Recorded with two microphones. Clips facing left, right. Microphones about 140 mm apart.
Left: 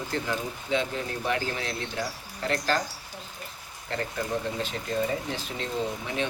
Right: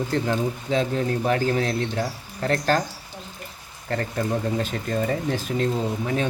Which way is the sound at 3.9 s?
45° right (ahead or behind).